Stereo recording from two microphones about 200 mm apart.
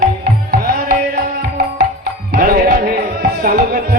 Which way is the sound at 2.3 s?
50° right (ahead or behind).